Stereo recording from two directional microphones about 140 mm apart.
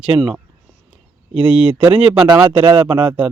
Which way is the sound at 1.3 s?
5° right (ahead or behind).